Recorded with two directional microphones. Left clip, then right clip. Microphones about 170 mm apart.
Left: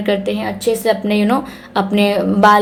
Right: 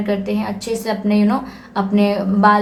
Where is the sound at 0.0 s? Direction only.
35° left (ahead or behind).